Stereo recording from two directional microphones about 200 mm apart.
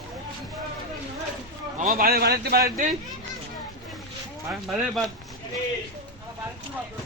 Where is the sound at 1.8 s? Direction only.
45° right (ahead or behind).